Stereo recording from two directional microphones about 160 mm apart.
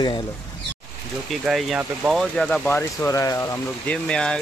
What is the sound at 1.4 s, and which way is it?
Speech, centre (ahead or behind).